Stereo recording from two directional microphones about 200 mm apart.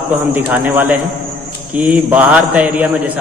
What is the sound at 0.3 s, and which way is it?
A man's voice, 10° right (ahead or behind).